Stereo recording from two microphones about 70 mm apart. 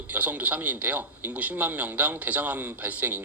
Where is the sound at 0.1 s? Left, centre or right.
Right.